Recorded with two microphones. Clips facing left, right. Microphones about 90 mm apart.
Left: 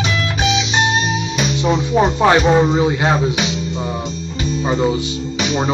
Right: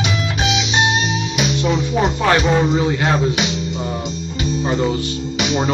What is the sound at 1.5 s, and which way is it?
Music, 15° left (ahead or behind).